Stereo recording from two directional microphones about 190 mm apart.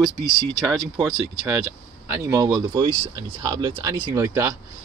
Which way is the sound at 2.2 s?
15° right (ahead or behind).